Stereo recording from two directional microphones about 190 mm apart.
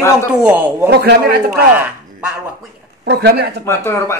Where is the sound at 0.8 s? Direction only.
60° right (ahead or behind).